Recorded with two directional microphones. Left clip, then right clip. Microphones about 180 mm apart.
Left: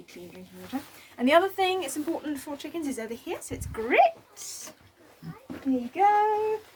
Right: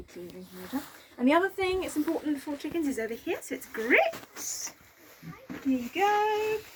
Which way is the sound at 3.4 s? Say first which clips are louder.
Right 2 dB; 15° left (ahead or behind).